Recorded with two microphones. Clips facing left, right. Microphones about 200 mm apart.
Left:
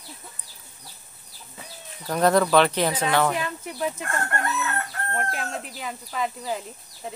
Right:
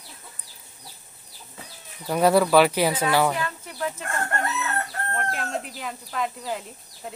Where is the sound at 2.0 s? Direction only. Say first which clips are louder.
Right 1 dB; 10° right (ahead or behind).